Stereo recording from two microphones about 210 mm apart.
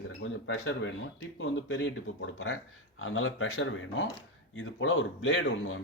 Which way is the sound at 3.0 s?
70° left (ahead or behind).